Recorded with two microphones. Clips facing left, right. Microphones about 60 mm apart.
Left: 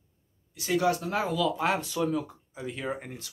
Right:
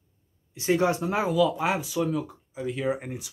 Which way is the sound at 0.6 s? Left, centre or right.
Right.